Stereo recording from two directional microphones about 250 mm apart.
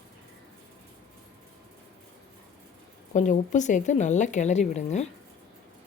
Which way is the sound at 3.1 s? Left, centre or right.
Left.